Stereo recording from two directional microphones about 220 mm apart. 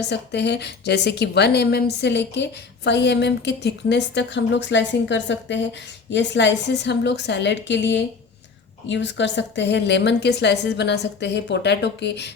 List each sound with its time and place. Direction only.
0.1 s a woman's voice: 50° left (ahead or behind)